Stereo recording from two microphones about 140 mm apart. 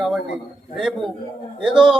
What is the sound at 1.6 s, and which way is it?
Speech, 5° right (ahead or behind).